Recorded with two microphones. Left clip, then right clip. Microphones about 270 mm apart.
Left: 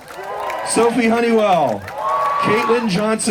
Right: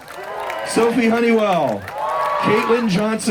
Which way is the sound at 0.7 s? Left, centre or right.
Left.